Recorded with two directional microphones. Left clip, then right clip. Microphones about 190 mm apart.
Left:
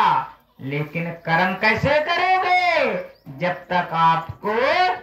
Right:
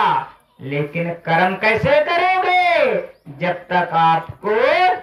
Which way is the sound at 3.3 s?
20° right (ahead or behind).